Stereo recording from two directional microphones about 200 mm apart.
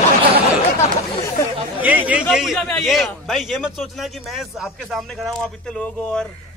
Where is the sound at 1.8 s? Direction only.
10° right (ahead or behind).